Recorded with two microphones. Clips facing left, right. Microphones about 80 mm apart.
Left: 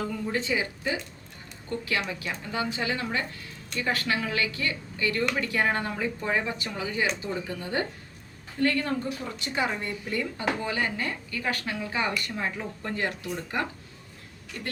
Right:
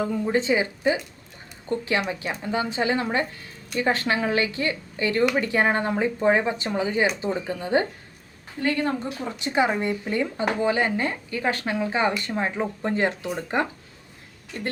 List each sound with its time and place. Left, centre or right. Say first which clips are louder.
0.0 s speech: right 6 dB; right